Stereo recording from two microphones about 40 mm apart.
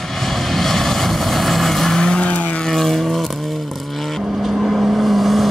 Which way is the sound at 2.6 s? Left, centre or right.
Centre.